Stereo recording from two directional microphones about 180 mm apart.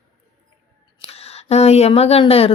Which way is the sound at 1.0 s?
35° left (ahead or behind).